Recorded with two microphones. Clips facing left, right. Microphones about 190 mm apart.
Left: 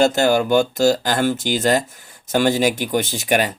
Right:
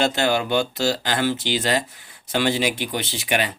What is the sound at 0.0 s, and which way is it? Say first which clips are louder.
Speech: left 5 dB; 45° left (ahead or behind).